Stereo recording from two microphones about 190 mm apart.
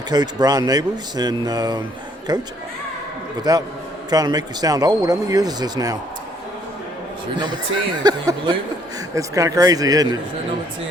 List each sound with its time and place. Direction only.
0.1 s speech: 20° right (ahead or behind)
3.5 s speech: 20° right (ahead or behind)
7.3 s speech: 25° right (ahead or behind)